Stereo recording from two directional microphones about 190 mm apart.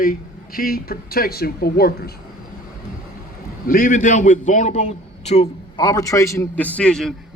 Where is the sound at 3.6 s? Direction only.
50° left (ahead or behind).